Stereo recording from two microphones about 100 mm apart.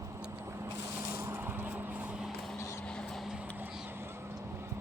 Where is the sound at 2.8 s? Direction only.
5° left (ahead or behind).